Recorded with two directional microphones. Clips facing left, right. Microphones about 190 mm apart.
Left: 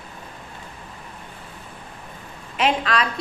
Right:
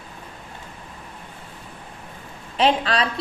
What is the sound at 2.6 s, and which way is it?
Speech, 30° right (ahead or behind).